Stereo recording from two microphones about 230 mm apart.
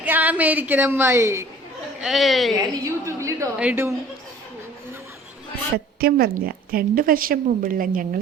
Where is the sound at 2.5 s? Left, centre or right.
Centre.